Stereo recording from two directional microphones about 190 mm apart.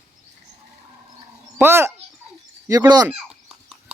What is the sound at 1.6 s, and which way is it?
Speech, 10° right (ahead or behind).